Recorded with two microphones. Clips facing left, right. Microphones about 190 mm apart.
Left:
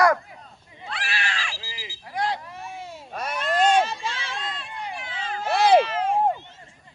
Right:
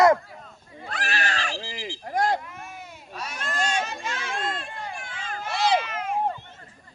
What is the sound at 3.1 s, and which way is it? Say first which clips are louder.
Baby cry: left 5 dB; 55° left (ahead or behind).